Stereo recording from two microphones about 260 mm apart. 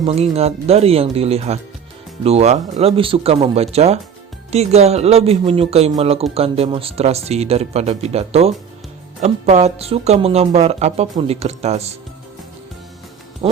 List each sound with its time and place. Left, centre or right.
0.0 s a woman's voice: right
13.4 s a woman's voice: centre